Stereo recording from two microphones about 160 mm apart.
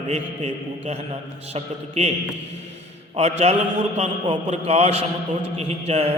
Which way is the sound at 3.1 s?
40° right (ahead or behind).